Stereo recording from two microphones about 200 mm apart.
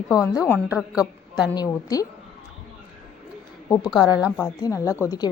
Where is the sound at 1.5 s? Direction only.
20° left (ahead or behind).